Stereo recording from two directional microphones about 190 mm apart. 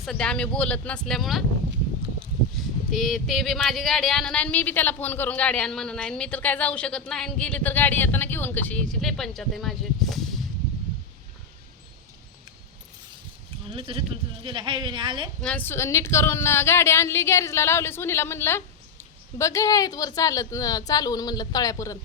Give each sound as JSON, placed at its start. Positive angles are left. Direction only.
{"t": 0.0, "sound": "speech", "side_deg": 0}
{"t": 2.9, "sound": "speech", "side_deg": 0}
{"t": 13.7, "sound": "a woman's voice", "side_deg": -30}
{"t": 15.4, "sound": "a woman's voice", "side_deg": 5}